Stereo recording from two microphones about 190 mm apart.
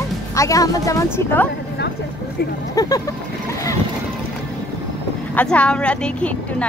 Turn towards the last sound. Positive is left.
turn(degrees=5)  # may be behind; listen again after turning